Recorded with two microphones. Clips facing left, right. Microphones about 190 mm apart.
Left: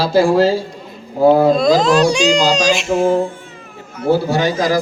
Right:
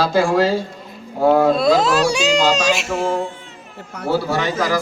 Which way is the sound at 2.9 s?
35° left (ahead or behind).